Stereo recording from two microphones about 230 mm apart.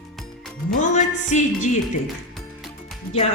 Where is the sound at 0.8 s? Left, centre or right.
Left.